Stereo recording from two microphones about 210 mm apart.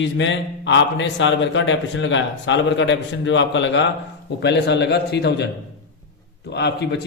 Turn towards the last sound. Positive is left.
turn(degrees=55)  # may be behind; listen again after turning